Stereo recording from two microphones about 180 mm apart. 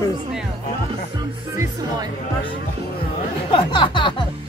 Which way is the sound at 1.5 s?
15° right (ahead or behind).